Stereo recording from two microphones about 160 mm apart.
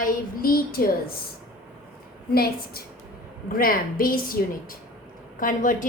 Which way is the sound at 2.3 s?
75° left (ahead or behind).